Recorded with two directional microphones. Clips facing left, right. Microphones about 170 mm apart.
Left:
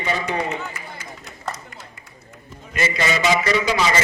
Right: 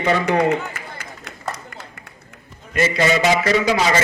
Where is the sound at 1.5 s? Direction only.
60° right (ahead or behind).